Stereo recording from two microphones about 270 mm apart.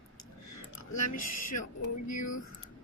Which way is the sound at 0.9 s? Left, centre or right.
Left.